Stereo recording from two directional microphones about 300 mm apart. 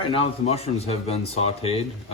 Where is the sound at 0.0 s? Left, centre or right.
Centre.